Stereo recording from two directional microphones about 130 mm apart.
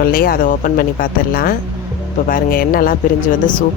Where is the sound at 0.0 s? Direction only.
90° left.